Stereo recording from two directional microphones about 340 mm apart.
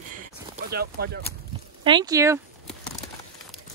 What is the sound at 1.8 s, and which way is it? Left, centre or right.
Speech, centre.